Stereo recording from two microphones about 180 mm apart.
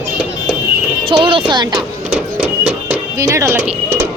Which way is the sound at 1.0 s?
30° right (ahead or behind).